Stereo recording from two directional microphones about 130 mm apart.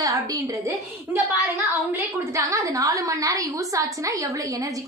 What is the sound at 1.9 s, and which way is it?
A woman's voice, 25° right (ahead or behind).